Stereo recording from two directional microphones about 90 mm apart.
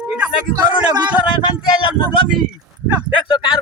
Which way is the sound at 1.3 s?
55° left (ahead or behind).